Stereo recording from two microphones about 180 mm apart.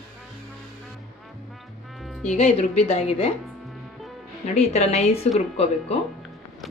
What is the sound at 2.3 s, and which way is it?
Speech, 35° left (ahead or behind).